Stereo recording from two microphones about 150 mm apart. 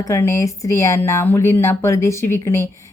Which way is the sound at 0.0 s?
20° left (ahead or behind).